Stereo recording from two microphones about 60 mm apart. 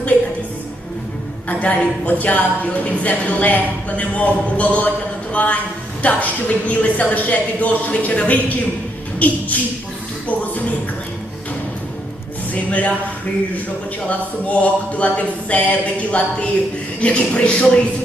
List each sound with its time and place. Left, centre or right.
1.5 s a woman's voice: left
12.5 s a woman's voice: left
14.1 s a woman's voice: left